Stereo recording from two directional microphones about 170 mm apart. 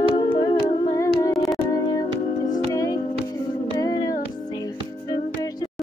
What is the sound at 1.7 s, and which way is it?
Music, 20° left (ahead or behind).